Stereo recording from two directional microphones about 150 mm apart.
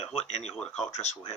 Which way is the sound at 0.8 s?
50° left (ahead or behind).